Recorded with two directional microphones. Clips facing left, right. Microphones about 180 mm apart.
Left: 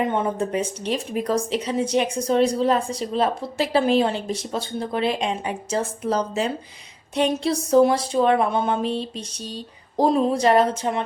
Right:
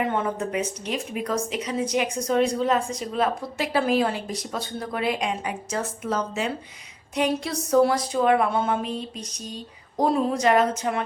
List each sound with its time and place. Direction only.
0.1 s a woman's voice: 20° left (ahead or behind)
0.5 s a woman's voice: 30° left (ahead or behind)